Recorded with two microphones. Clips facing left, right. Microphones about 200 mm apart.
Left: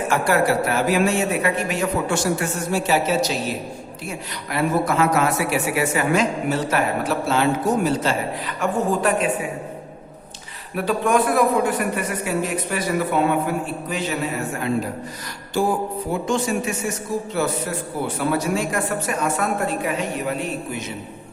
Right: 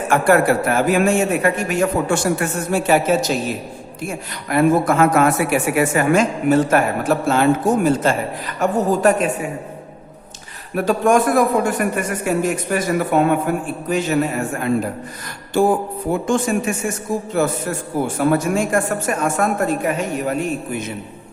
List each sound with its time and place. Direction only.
0.1 s a woman's voice: 55° right (ahead or behind)
10.8 s a woman's voice: 45° right (ahead or behind)
16.2 s a woman's voice: 50° right (ahead or behind)